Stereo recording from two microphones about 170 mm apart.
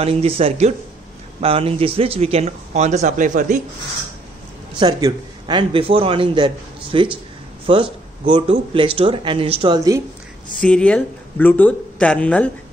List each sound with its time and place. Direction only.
0.0 s speech: 35° right (ahead or behind)
4.7 s a man's voice: 25° right (ahead or behind)
9.8 s speech: 20° right (ahead or behind)
10.6 s speech: 5° left (ahead or behind)